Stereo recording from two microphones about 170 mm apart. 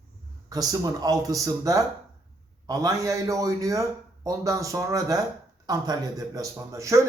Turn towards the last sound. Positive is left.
turn(degrees=-20)  # may be behind; listen again after turning